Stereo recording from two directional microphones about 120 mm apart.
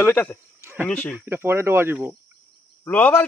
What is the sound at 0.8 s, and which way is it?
Speech, 15° left (ahead or behind).